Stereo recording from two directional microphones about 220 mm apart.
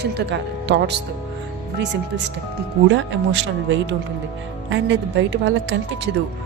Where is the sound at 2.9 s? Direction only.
55° right (ahead or behind).